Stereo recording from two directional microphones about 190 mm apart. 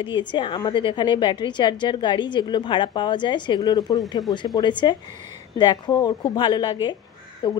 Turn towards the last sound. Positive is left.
turn(degrees=25)  # may be behind; listen again after turning